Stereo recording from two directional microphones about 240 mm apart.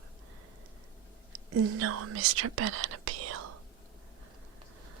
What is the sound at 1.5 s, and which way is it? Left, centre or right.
Speech, right.